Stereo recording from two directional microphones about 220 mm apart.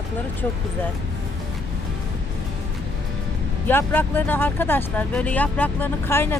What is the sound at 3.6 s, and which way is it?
Speech, 10° left (ahead or behind).